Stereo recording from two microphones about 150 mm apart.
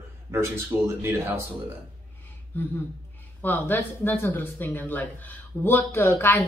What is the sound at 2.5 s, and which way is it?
Speech, 10° left (ahead or behind).